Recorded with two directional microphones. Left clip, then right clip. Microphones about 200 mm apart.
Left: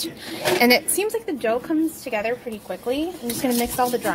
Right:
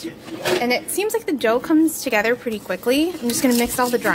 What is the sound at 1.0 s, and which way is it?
A woman's voice, 10° right (ahead or behind).